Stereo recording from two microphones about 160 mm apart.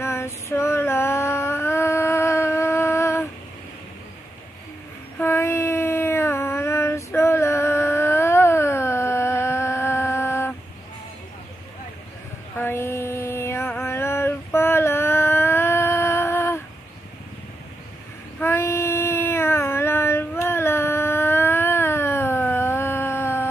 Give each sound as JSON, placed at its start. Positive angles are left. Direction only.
{"t": 0.0, "sound": "female singing", "side_deg": 15}
{"t": 5.2, "sound": "child singing", "side_deg": 15}
{"t": 12.5, "sound": "mantra", "side_deg": 15}
{"t": 18.4, "sound": "child singing", "side_deg": 15}